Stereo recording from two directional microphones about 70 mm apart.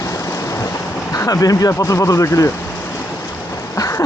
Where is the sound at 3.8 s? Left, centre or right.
Left.